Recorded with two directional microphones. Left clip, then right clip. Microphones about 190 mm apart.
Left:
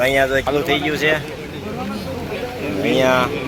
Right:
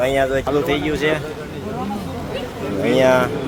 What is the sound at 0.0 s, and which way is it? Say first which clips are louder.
Speech: left 2 dB; 5° right (ahead or behind).